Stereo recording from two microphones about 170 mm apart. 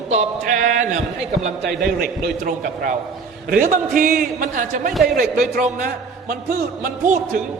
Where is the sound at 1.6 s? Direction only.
65° right (ahead or behind).